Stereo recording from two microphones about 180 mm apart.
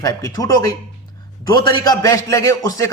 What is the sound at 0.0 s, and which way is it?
A man's voice, 20° left (ahead or behind).